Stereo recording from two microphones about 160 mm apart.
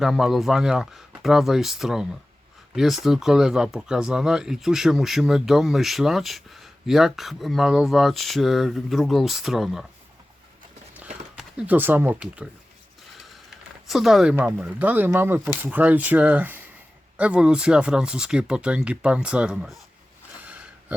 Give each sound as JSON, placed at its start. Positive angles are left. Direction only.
{"t": 0.0, "sound": "speech", "side_deg": 0}
{"t": 11.3, "sound": "speech", "side_deg": -5}
{"t": 13.8, "sound": "speech", "side_deg": 0}